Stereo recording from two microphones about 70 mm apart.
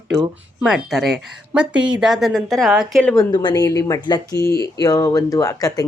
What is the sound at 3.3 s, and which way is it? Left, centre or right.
Speech, left.